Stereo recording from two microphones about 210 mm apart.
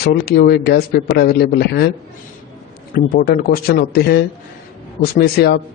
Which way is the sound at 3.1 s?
45° left (ahead or behind).